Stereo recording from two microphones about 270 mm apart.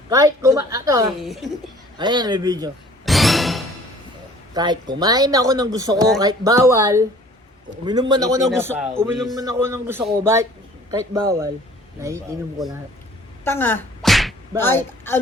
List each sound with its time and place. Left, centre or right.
0.1 s speech: centre
1.1 s a man's voice: centre
2.0 s speech: centre
3.1 s music: centre
4.5 s a man's voice: centre
9.3 s speech: centre
13.4 s a sound: centre
14.6 s speech: centre